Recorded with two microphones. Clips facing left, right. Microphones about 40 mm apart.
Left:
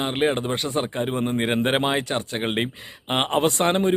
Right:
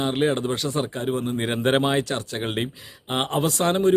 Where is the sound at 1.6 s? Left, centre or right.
Centre.